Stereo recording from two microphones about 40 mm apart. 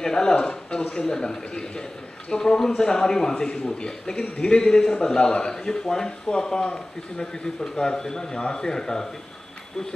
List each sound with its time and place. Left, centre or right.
0.0 s a man's voice: centre